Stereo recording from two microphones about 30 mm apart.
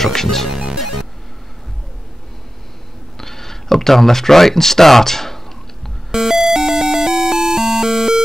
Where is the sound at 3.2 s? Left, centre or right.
Centre.